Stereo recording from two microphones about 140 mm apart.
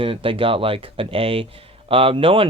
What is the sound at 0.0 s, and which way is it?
Speech, 40° right (ahead or behind).